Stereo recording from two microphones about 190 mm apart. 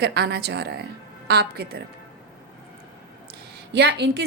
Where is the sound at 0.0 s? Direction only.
60° right (ahead or behind).